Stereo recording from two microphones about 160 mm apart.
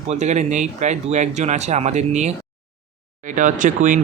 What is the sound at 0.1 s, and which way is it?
Speech, 45° right (ahead or behind).